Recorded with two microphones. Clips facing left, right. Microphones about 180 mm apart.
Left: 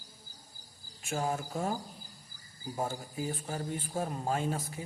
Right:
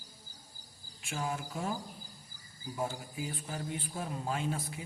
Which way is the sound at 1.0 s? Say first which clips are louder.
Left 4 dB; 45° left (ahead or behind).